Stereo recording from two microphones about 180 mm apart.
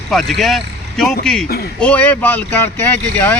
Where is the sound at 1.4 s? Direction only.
60° left (ahead or behind).